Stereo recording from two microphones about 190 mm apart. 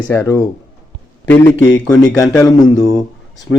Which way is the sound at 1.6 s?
20° left (ahead or behind).